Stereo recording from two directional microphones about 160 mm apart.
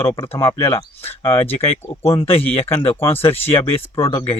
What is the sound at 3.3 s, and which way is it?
Speech, 15° left (ahead or behind).